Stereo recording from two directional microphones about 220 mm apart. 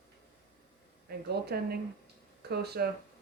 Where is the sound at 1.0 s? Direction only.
45° right (ahead or behind).